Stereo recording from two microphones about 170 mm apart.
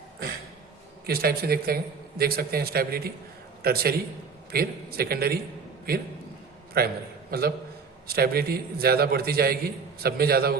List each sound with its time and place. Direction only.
1.0 s a man's voice: 65° right (ahead or behind)
6.7 s a man's voice: 65° right (ahead or behind)